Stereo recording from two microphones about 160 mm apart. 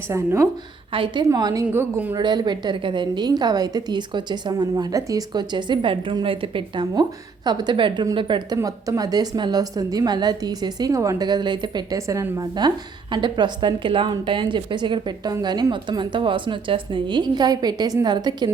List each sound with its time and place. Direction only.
0.1 s a woman's voice: 15° right (ahead or behind)
0.9 s a woman's voice: 30° right (ahead or behind)
1.6 s a woman's voice: 10° right (ahead or behind)
2.1 s a woman's voice: 25° right (ahead or behind)